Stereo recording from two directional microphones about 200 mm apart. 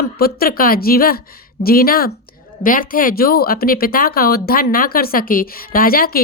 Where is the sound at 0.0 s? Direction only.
50° left (ahead or behind).